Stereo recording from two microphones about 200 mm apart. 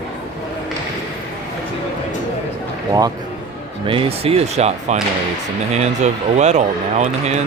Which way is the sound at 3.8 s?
25° right (ahead or behind).